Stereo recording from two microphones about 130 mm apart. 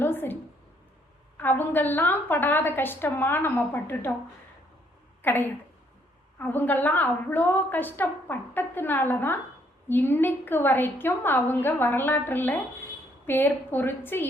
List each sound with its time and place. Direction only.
0.0 s a sound: 15° left (ahead or behind)
1.4 s a woman's voice: 15° left (ahead or behind)
5.2 s a woman's voice: 15° left (ahead or behind)